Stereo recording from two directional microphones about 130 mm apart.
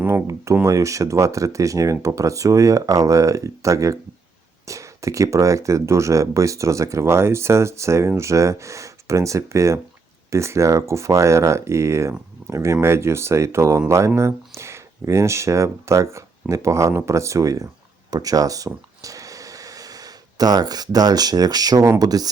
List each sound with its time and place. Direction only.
0.0 s speech: 20° right (ahead or behind)